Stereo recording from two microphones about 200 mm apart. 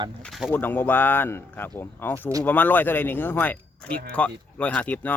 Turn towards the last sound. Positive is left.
turn(degrees=5)  # may be behind; listen again after turning